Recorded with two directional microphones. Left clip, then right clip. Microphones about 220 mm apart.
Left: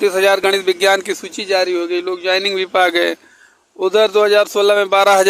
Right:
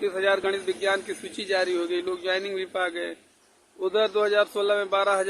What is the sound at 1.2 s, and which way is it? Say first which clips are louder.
A man's voice: left 9 dB; 35° left (ahead or behind).